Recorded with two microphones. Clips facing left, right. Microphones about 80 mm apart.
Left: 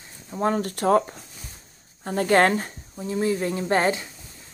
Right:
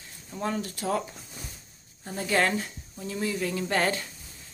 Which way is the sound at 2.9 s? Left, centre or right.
Left.